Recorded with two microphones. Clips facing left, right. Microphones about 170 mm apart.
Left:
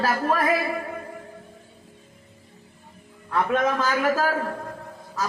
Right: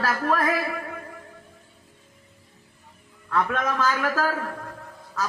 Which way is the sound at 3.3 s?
20° left (ahead or behind).